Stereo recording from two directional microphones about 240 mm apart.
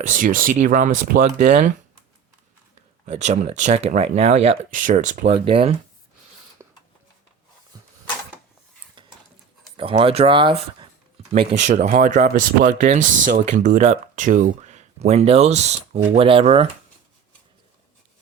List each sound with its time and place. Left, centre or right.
0.0 s speech: right
3.1 s speech: right
9.7 s speech: right